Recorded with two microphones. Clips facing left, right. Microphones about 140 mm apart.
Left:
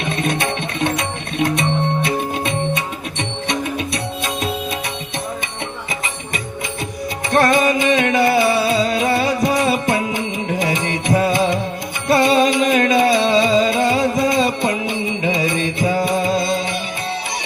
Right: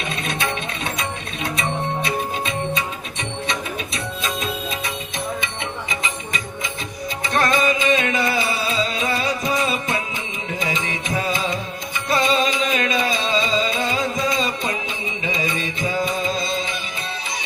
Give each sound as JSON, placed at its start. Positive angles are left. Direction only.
{"t": 0.2, "sound": "music", "side_deg": 60}
{"t": 7.5, "sound": "music", "side_deg": 50}
{"t": 11.2, "sound": "music", "side_deg": 55}